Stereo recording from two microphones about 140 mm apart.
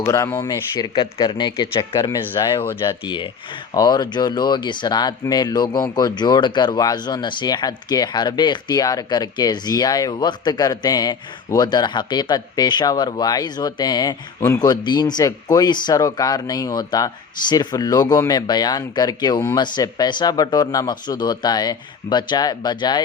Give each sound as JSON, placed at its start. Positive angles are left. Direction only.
{"t": 0.0, "sound": "speech", "side_deg": 20}
{"t": 0.4, "sound": "speech", "side_deg": 30}
{"t": 1.9, "sound": "speech", "side_deg": 20}
{"t": 2.8, "sound": "speech", "side_deg": 35}